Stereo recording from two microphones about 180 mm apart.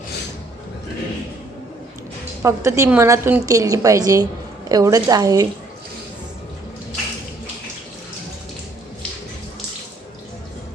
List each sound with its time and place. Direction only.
2.4 s a woman's voice: 15° right (ahead or behind)